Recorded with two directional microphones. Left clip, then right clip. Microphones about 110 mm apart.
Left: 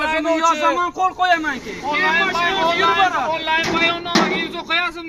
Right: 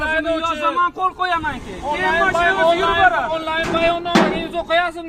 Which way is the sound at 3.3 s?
15° right (ahead or behind).